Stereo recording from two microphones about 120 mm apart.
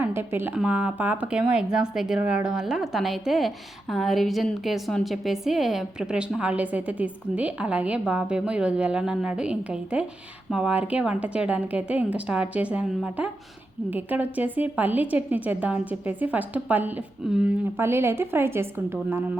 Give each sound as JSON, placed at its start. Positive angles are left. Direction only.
{"t": 0.0, "sound": "a woman's voice", "side_deg": -20}
{"t": 17.7, "sound": "a woman's voice", "side_deg": -20}